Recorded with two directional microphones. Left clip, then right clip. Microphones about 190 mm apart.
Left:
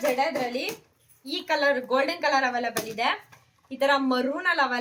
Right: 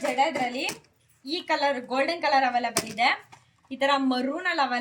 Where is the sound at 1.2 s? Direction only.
10° left (ahead or behind).